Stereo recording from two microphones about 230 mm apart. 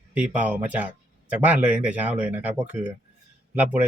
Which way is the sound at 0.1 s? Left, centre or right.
Centre.